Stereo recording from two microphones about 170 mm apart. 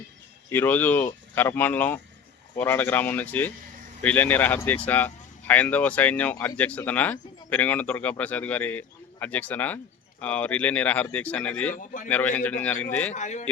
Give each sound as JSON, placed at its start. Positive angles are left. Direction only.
{"t": 0.5, "sound": "speech", "side_deg": 10}
{"t": 11.7, "sound": "speech", "side_deg": 50}
{"t": 12.0, "sound": "speech", "side_deg": 10}
{"t": 13.1, "sound": "speech", "side_deg": 45}